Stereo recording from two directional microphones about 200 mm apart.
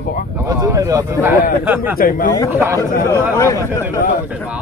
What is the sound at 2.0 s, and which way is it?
Speech, 45° left (ahead or behind).